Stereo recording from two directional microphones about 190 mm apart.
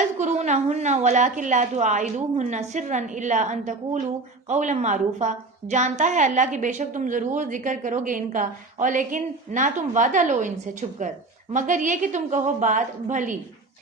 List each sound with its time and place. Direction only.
0.2 s a woman's voice: 40° right (ahead or behind)